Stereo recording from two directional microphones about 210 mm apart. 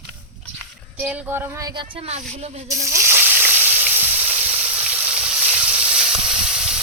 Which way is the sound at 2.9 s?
10° right (ahead or behind).